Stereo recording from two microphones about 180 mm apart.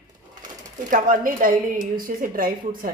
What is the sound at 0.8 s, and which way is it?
A woman's voice, 45° right (ahead or behind).